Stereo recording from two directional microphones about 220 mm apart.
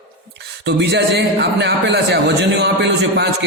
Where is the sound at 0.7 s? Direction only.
50° right (ahead or behind).